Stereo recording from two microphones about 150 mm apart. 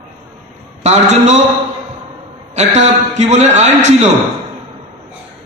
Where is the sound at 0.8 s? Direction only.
50° right (ahead or behind).